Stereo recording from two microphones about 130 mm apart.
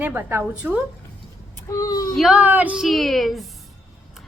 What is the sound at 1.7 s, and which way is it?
Speech, 30° left (ahead or behind).